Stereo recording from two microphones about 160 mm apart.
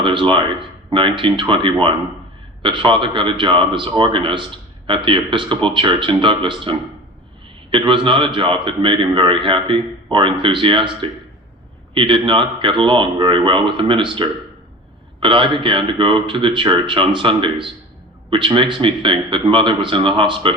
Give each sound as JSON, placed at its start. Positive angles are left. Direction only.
{"t": 0.0, "sound": "speech", "side_deg": -30}